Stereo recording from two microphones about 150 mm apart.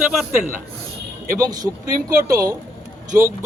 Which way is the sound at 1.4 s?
25° right (ahead or behind).